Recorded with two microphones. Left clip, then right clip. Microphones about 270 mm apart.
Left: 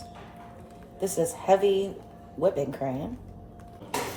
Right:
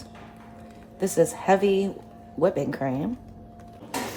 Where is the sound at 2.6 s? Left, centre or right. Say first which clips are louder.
Right 2 dB; right.